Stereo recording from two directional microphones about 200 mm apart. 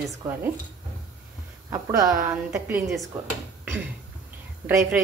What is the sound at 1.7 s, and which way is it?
A woman's voice, 15° right (ahead or behind).